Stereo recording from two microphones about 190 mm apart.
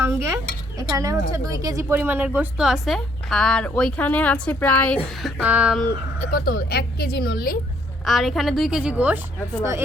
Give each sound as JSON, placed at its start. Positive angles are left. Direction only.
{"t": 0.0, "sound": "dishes", "side_deg": -15}
{"t": 0.8, "sound": "a woman's voice", "side_deg": -15}
{"t": 5.4, "sound": "speech", "side_deg": -5}
{"t": 6.1, "sound": "speech", "side_deg": 50}
{"t": 8.0, "sound": "a woman's voice", "side_deg": 0}